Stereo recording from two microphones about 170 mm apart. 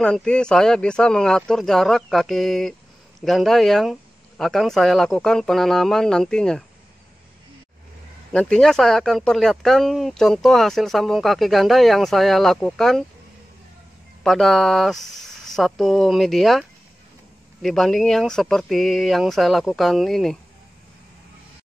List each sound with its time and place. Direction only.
0.0 s speech: 5° left (ahead or behind)
8.3 s speech: 5° left (ahead or behind)
14.2 s speech: centre (ahead or behind)